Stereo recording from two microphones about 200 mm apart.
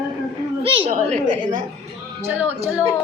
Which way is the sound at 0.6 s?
25° right (ahead or behind).